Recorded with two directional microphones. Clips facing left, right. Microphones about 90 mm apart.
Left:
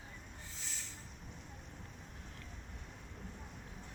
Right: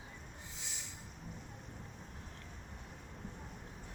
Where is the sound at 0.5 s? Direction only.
15° right (ahead or behind).